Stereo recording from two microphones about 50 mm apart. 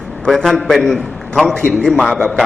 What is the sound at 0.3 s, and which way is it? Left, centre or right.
Speech, centre.